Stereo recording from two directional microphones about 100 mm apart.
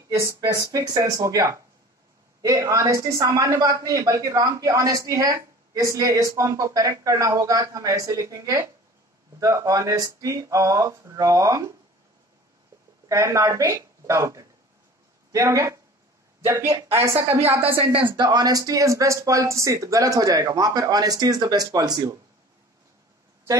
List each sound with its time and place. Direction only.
0.1 s speech: 30° right (ahead or behind)
13.1 s a woman's voice: 30° right (ahead or behind)
17.7 s speech: 55° right (ahead or behind)